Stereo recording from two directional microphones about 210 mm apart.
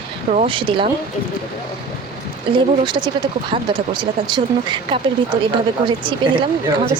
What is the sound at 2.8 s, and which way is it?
Speech, 20° right (ahead or behind).